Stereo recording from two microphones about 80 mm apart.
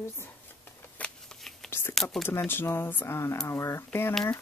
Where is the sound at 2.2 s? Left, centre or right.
Left.